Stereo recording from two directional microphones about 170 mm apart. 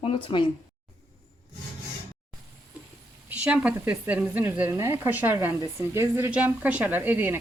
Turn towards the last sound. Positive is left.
turn(degrees=-10)  # may be behind; listen again after turning